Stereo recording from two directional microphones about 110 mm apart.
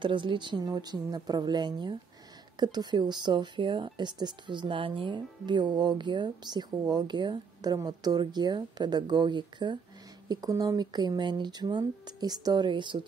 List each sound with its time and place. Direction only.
0.0 s speech: 50° right (ahead or behind)